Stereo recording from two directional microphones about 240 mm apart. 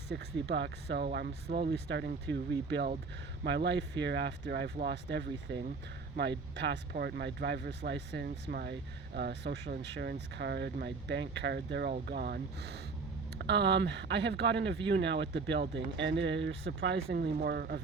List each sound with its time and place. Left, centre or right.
0.1 s speech: right